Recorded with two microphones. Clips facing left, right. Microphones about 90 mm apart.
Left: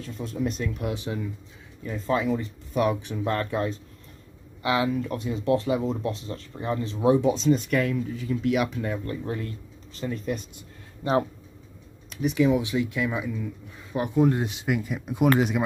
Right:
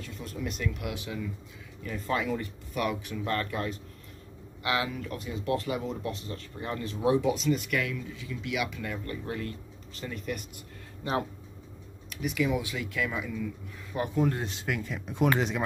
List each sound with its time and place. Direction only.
0.0 s speech: 35° left (ahead or behind)
1.8 s speech: 25° left (ahead or behind)
12.1 s speech: 30° left (ahead or behind); by 15.6 s 5° left (ahead or behind)